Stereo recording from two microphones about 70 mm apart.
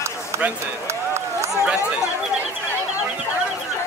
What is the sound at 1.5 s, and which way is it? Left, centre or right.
Chatter, centre.